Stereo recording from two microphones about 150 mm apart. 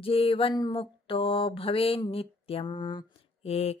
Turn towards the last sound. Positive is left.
turn(degrees=45)  # may be behind; listen again after turning